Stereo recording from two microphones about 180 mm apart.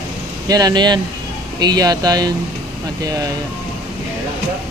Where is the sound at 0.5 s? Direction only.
20° right (ahead or behind).